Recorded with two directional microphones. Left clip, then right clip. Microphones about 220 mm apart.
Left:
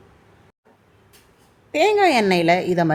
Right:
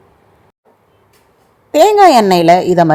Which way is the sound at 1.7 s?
25° right (ahead or behind).